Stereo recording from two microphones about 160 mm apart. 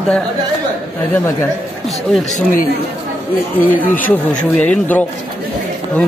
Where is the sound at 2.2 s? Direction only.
50° left (ahead or behind).